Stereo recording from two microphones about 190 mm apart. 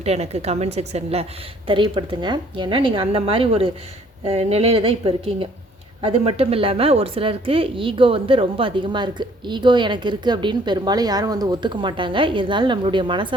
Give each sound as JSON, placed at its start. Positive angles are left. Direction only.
{"t": 0.0, "sound": "speech", "side_deg": -35}